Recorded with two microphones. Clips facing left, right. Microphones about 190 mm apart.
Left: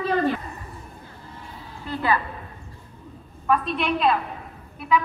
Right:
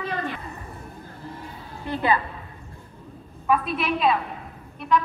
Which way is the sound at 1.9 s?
20° right (ahead or behind).